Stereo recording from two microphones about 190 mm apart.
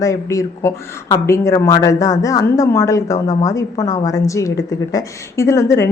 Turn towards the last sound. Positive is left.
turn(degrees=15)  # may be behind; listen again after turning